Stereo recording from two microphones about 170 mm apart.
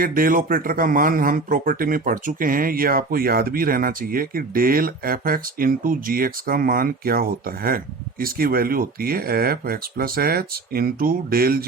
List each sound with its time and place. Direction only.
0.0 s speech: 55° right (ahead or behind)